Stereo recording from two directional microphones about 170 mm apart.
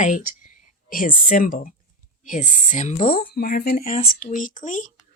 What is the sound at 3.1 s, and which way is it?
Speech, 65° left (ahead or behind).